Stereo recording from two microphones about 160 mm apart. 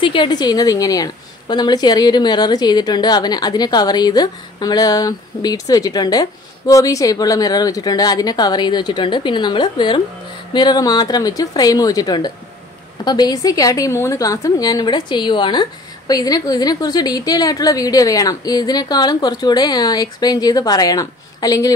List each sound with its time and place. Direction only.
0.0 s a woman's voice: 30° left (ahead or behind)